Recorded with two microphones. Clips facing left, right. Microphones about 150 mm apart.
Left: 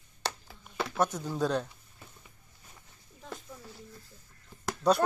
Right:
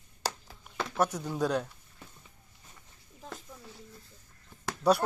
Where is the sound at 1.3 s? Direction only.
10° right (ahead or behind).